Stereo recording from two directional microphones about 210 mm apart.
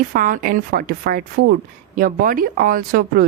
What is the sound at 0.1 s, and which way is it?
Speech, 40° right (ahead or behind).